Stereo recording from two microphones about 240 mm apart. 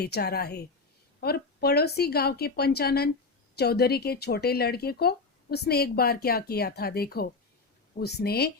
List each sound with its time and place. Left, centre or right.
0.0 s speech: left